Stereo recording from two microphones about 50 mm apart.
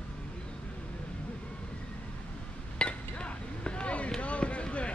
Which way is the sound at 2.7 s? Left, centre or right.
Left.